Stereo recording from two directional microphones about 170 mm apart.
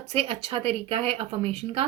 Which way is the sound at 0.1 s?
35° right (ahead or behind).